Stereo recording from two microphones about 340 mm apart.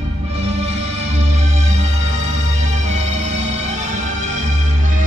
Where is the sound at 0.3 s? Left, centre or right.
Centre.